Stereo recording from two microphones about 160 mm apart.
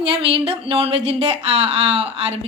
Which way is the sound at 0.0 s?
35° right (ahead or behind).